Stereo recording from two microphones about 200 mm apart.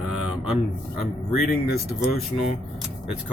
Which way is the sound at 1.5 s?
50° left (ahead or behind).